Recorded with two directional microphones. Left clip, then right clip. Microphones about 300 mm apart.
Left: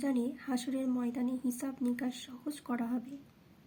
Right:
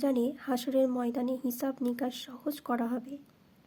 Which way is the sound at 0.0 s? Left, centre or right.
Right.